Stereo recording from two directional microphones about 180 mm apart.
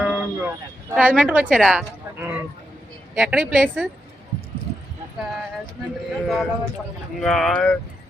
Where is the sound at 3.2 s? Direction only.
5° right (ahead or behind).